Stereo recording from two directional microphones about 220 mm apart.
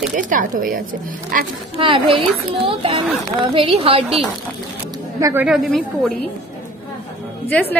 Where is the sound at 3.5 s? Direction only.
25° right (ahead or behind).